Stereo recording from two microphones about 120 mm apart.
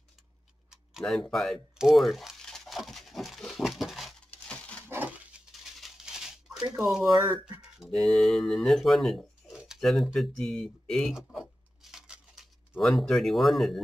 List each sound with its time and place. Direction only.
0.7 s tick-tock: centre (ahead or behind)
1.3 s crumpling: 5° left (ahead or behind)
4.8 s a sound: 15° right (ahead or behind)
5.6 s crumpling: centre (ahead or behind)
6.8 s speech: 5° right (ahead or behind)
7.1 s speech: 40° right (ahead or behind)
7.9 s speech: centre (ahead or behind)
9.6 s a sound: centre (ahead or behind)